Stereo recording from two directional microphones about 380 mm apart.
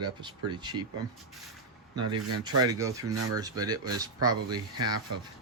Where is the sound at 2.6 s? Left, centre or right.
Centre.